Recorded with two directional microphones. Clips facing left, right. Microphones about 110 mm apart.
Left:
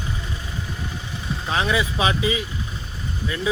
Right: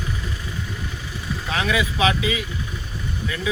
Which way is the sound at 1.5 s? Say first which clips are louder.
Left 1 dB; 30° left (ahead or behind).